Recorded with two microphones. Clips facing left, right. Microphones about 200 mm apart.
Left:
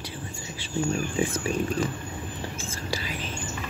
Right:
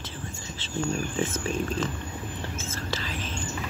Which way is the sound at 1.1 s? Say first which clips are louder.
Left 2 dB; 15° left (ahead or behind).